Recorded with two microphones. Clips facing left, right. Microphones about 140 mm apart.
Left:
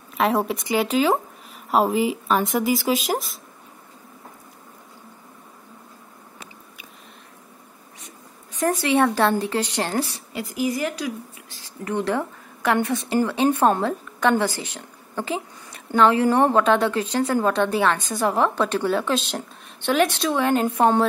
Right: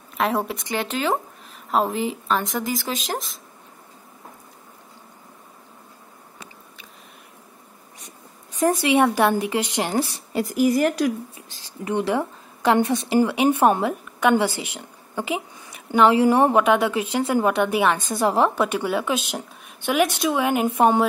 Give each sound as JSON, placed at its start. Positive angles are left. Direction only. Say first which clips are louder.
{"t": 0.2, "sound": "speech", "louder": "left 2 dB", "side_deg": 0}
{"t": 8.5, "sound": "a woman's voice", "louder": "right 2 dB", "side_deg": -15}
{"t": 10.3, "sound": "a woman's voice", "louder": "right 6 dB", "side_deg": -50}
{"t": 11.3, "sound": "a woman's voice", "louder": "right 1 dB", "side_deg": -20}